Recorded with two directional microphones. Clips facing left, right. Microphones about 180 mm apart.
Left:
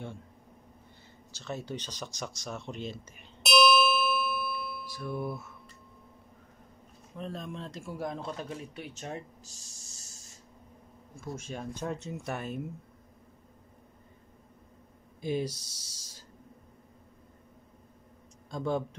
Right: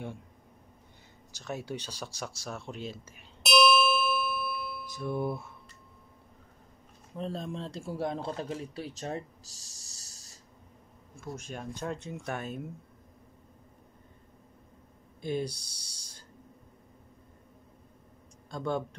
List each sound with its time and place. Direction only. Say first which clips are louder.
1.4 s speech: right 1 dB; 10° right (ahead or behind)
4.9 s mantra: right 4 dB; 20° right (ahead or behind)
7.2 s speech: right 3 dB; 30° right (ahead or behind)
11.1 s speech: left 1 dB; centre (ahead or behind)
15.2 s speech: left 1 dB; 5° left (ahead or behind)
18.5 s speech: left 1 dB; centre (ahead or behind)